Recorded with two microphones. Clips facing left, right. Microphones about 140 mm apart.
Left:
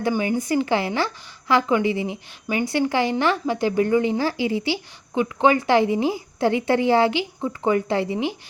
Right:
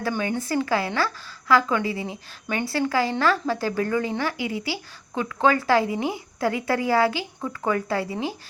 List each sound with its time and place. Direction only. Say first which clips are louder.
0.1 s a woman's voice: left 4 dB; 15° left (ahead or behind)